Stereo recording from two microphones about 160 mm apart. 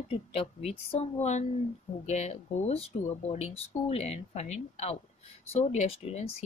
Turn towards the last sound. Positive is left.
turn(degrees=40)  # may be behind; listen again after turning